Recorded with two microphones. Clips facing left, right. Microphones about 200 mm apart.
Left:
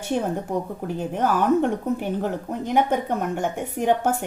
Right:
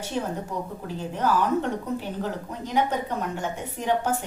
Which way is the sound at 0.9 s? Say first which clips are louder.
Left 2 dB; 55° left (ahead or behind).